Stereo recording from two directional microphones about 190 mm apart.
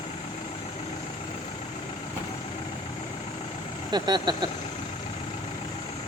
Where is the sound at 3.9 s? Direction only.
20° right (ahead or behind).